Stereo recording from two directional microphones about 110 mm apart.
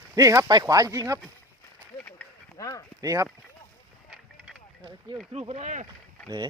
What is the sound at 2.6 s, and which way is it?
Speech, 30° left (ahead or behind).